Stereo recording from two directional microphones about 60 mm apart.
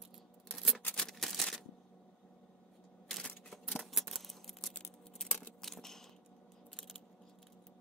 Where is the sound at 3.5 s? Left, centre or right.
Centre.